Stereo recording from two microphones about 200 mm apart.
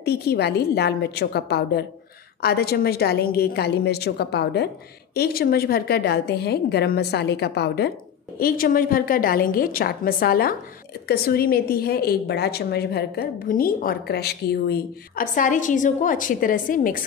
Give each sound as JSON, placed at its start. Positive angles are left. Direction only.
{"t": 0.0, "sound": "a woman's voice", "side_deg": 55}